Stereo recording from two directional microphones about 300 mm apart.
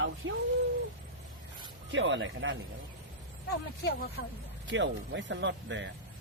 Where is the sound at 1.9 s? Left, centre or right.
Right.